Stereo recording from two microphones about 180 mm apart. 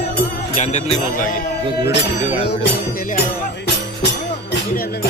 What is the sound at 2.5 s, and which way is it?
Music, 55° left (ahead or behind).